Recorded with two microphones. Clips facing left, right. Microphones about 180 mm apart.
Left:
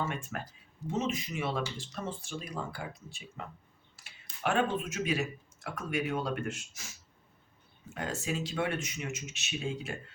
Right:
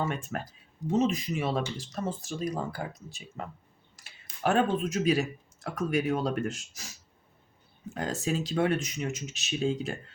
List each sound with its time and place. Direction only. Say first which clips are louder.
0.0 s speech: right 4 dB; 40° right (ahead or behind)
7.9 s speech: right 4 dB; 35° right (ahead or behind)